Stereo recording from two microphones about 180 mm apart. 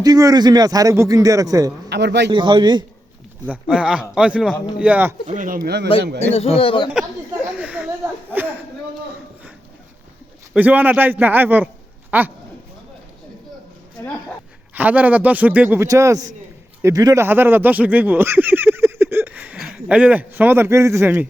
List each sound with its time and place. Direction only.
0.0 s a man's voice: 20° right (ahead or behind)
1.9 s a man's voice: 70° right (ahead or behind)
2.3 s a man's voice: 25° right (ahead or behind)
3.4 s a man's voice: 5° right (ahead or behind)
5.3 s speech: 50° right (ahead or behind); by 5.9 s 65° right (ahead or behind)
6.3 s speech: 35° left (ahead or behind)
7.6 s a sound: 5° right (ahead or behind)
10.5 s a man's voice: 10° right (ahead or behind)
14.7 s a man's voice: 10° right (ahead or behind)